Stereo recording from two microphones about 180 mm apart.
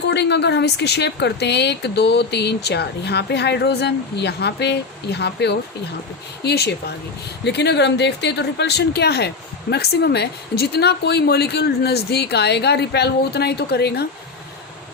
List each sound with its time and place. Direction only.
0.1 s a woman's voice: 70° left (ahead or behind)